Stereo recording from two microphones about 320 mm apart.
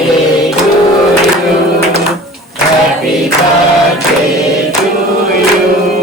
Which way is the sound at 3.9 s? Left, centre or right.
Centre.